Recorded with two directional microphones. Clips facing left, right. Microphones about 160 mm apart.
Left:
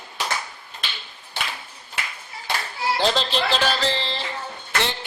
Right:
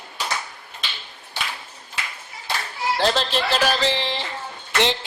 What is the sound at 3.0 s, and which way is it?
Speech, centre (ahead or behind).